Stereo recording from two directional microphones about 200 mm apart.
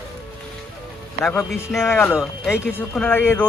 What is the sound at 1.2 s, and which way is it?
Speech, 10° left (ahead or behind).